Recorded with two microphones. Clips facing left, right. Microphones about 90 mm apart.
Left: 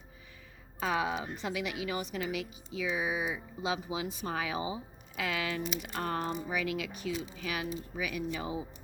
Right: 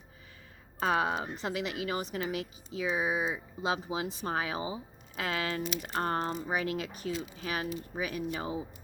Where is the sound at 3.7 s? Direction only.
40° right (ahead or behind).